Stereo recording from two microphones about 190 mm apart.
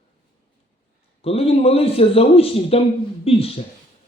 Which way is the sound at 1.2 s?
30° left (ahead or behind).